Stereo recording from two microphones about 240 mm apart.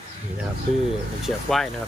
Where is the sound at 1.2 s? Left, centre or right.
Centre.